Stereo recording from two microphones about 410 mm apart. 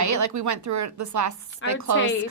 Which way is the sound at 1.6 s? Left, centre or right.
Left.